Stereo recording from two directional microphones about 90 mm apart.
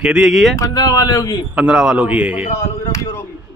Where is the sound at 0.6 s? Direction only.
40° left (ahead or behind).